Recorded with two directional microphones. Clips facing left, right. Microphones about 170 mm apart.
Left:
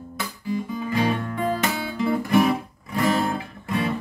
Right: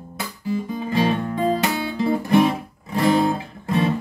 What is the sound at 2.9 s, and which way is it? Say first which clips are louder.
Guitar: right 4 dB; 25° right (ahead or behind).